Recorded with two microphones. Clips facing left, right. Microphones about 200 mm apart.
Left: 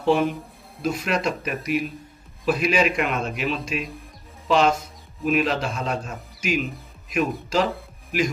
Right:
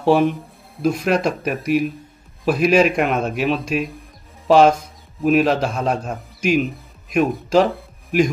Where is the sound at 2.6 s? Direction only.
50° right (ahead or behind).